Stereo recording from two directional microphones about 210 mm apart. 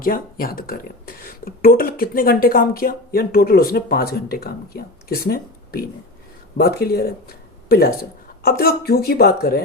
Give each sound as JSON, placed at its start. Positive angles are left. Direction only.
{"t": 0.0, "sound": "speech", "side_deg": 45}